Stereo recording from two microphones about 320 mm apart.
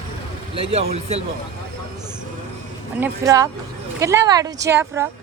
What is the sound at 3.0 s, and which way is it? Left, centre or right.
Speech, centre.